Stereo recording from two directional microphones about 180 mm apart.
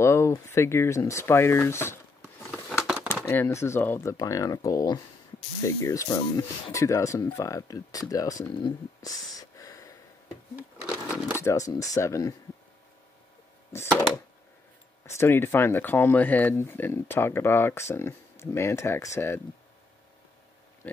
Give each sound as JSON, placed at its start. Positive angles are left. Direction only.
{"t": 0.0, "sound": "speech", "side_deg": 15}
{"t": 2.5, "sound": "a sound", "side_deg": 0}
{"t": 3.1, "sound": "speech", "side_deg": 10}
{"t": 11.1, "sound": "a sound", "side_deg": -10}
{"t": 11.4, "sound": "speech", "side_deg": 20}
{"t": 15.1, "sound": "speech", "side_deg": 15}
{"t": 20.8, "sound": "speech", "side_deg": 10}